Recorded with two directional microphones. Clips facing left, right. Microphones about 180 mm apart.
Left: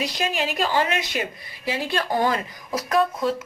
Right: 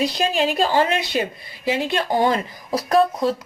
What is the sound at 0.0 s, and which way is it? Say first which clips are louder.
A woman's voice: right 5 dB; 30° right (ahead or behind).